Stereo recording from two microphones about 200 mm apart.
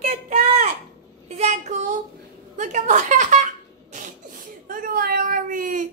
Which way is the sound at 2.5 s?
40° right (ahead or behind).